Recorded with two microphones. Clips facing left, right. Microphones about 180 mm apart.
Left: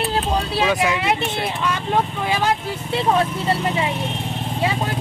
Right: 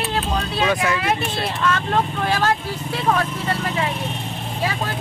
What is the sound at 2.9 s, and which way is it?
Speech, 25° left (ahead or behind).